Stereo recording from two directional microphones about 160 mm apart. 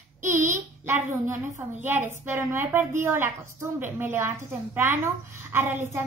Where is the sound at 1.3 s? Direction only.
15° right (ahead or behind).